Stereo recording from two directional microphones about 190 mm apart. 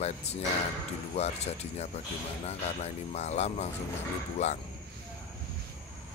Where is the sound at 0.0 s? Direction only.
35° left (ahead or behind).